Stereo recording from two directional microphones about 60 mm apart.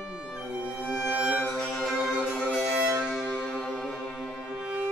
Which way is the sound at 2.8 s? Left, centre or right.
Centre.